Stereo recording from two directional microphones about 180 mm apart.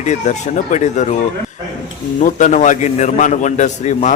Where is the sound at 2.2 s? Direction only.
45° left (ahead or behind).